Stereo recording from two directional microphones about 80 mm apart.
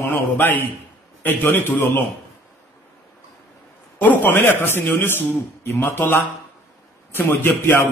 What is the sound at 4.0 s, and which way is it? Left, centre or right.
A man's voice, left.